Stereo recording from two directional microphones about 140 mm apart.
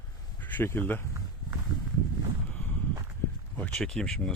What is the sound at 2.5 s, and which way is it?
Walk, 10° left (ahead or behind).